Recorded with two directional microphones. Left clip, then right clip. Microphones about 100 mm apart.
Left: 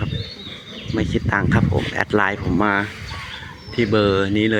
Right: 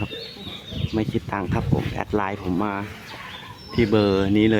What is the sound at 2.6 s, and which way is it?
Speech, 30° left (ahead or behind).